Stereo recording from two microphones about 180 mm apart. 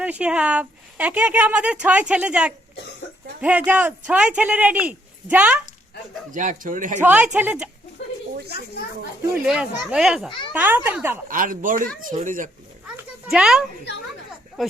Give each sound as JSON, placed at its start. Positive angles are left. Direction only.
{"t": 0.0, "sound": "speech", "side_deg": -5}
{"t": 6.3, "sound": "speech", "side_deg": -45}
{"t": 7.0, "sound": "speech", "side_deg": -10}
{"t": 8.4, "sound": "a child's voice", "side_deg": 60}
{"t": 9.5, "sound": "a child's voice", "side_deg": -5}
{"t": 11.3, "sound": "speech", "side_deg": -50}
{"t": 13.3, "sound": "a child's voice", "side_deg": -5}